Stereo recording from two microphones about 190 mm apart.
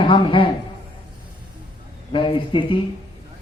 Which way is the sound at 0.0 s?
25° left (ahead or behind).